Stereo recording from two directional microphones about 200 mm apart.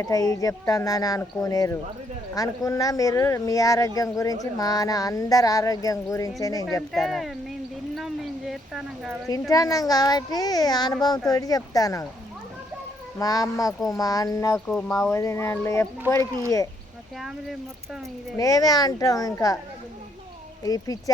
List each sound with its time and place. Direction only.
0.0 s speech: 15° left (ahead or behind)
6.9 s speech: centre (ahead or behind)
7.9 s a sound: centre (ahead or behind)
9.5 s a child's voice: 15° left (ahead or behind)
13.1 s speech: 15° left (ahead or behind)
14.5 s speech: 5° left (ahead or behind)
14.9 s speech: 15° left (ahead or behind)
17.2 s speech: centre (ahead or behind)
18.3 s speech: 15° left (ahead or behind)
20.7 s a child's voice: 20° left (ahead or behind)